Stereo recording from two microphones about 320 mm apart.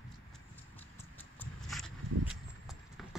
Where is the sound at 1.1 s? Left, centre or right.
Centre.